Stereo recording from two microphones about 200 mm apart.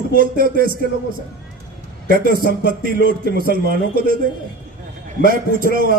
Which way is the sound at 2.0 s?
45° right (ahead or behind).